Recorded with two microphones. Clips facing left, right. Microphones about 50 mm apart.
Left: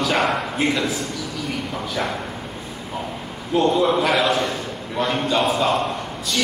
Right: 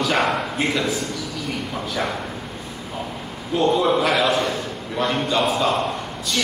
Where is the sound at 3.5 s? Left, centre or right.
Centre.